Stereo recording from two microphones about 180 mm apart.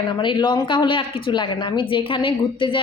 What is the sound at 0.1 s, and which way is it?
A woman's voice, 25° left (ahead or behind).